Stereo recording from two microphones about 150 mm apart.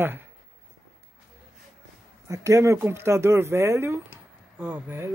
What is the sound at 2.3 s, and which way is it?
Speech, 20° right (ahead or behind).